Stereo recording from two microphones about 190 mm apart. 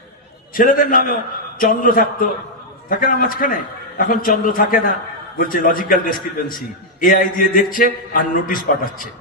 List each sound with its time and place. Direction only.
0.5 s a man's voice: 45° left (ahead or behind)